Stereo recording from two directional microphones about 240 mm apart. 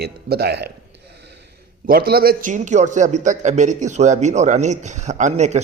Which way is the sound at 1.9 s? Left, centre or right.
Right.